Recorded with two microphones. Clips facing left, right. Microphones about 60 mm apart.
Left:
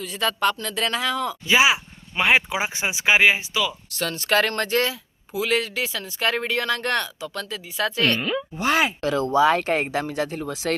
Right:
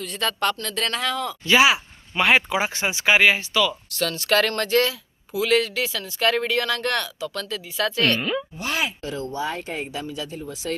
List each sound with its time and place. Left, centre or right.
0.0 s speech: centre
3.9 s speech: left
8.2 s speech: centre
8.5 s speech: left
9.0 s speech: left